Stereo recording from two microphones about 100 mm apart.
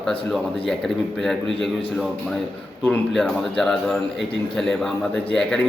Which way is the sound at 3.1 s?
5° left (ahead or behind).